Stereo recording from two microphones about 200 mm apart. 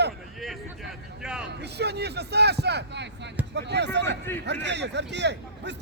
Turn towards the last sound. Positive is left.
turn(degrees=-60)  # may be behind; listen again after turning